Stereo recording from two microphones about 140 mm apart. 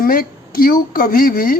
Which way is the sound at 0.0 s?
90° left.